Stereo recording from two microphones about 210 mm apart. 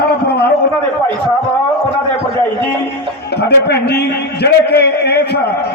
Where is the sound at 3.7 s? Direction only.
50° left (ahead or behind).